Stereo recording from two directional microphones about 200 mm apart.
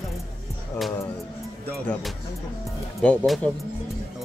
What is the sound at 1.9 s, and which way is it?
Speech, centre (ahead or behind).